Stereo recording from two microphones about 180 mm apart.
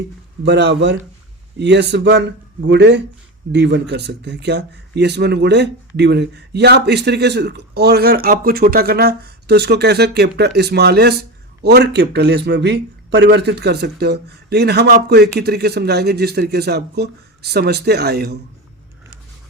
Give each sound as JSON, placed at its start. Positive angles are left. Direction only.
{"t": 0.4, "sound": "speech", "side_deg": -70}